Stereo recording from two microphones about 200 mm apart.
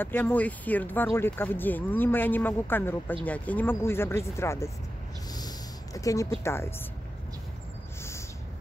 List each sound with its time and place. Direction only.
0.0 s speech: 10° left (ahead or behind)
5.9 s speech: 15° left (ahead or behind)